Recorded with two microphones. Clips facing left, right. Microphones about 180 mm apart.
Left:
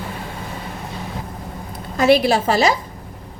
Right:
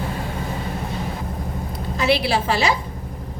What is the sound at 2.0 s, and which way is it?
Speech, 45° left (ahead or behind).